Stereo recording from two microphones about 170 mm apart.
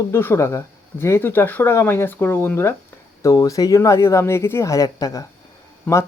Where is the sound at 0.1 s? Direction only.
15° left (ahead or behind).